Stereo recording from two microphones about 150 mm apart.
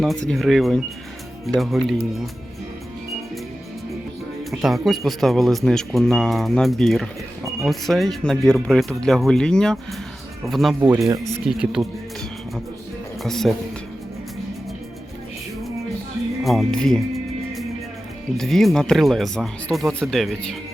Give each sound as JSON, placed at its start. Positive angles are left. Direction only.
{"t": 0.0, "sound": "speech", "side_deg": 5}
{"t": 4.6, "sound": "speech", "side_deg": 0}
{"t": 10.8, "sound": "speech", "side_deg": -20}
{"t": 11.4, "sound": "speech", "side_deg": -5}
{"t": 13.2, "sound": "speech", "side_deg": 5}
{"t": 16.4, "sound": "speech", "side_deg": 0}
{"t": 18.3, "sound": "speech", "side_deg": 0}